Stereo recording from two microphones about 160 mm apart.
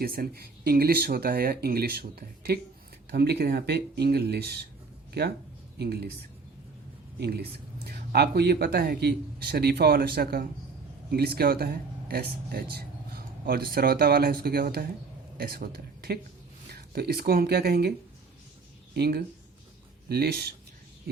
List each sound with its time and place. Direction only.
0.0 s speech: 70° right (ahead or behind)
5.8 s speech: 90° right
7.2 s speech: 85° right
18.9 s speech: 85° right